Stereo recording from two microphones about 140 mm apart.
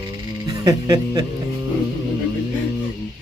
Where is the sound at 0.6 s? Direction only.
30° right (ahead or behind).